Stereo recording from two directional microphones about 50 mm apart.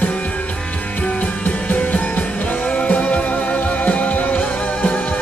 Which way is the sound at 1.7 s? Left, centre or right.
Left.